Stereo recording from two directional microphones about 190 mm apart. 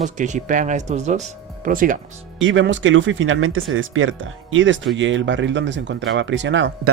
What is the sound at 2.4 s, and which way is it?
Speech, 80° right.